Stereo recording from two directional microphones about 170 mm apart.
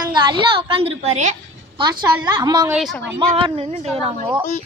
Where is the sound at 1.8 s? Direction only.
25° right (ahead or behind).